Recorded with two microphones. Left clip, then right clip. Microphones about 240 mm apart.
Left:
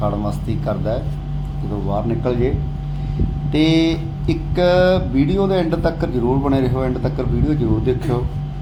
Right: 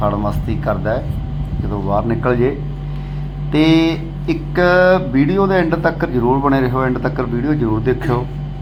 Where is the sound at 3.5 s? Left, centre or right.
Centre.